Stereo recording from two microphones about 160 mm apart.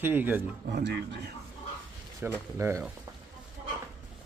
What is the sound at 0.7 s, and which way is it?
Speech, 90° right.